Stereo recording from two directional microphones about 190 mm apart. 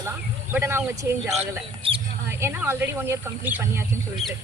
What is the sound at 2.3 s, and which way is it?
Speech, 15° right (ahead or behind).